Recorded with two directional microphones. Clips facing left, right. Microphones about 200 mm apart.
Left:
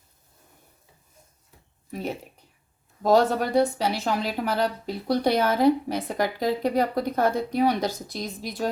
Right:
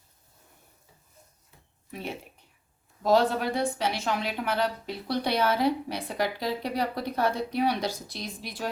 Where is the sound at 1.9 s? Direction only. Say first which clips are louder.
Left 5 dB; 40° left (ahead or behind).